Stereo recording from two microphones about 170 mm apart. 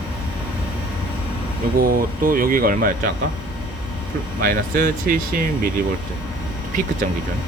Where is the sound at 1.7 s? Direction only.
55° right (ahead or behind).